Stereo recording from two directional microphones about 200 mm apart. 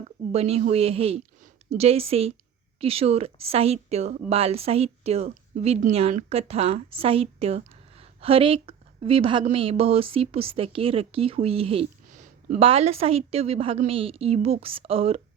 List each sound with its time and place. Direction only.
0.3 s a woman's voice: 30° right (ahead or behind)